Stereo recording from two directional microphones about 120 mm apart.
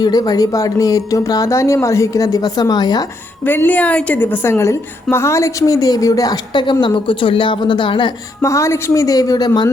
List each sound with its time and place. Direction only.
0.0 s a woman's voice: 35° left (ahead or behind)
3.4 s a woman's voice: 15° left (ahead or behind); by 8.1 s 40° left (ahead or behind)
8.4 s a woman's voice: 25° left (ahead or behind)